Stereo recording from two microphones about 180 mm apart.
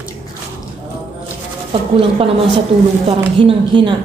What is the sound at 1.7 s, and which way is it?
A woman's voice, 30° right (ahead or behind).